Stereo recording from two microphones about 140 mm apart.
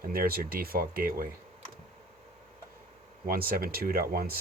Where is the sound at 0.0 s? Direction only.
90° right.